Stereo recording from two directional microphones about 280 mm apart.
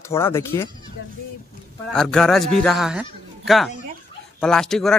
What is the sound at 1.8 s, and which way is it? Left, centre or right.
A man's voice, centre.